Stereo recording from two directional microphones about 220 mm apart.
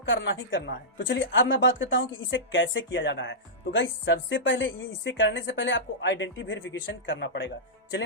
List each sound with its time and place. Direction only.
0.0 s a woman's voice: 55° left (ahead or behind)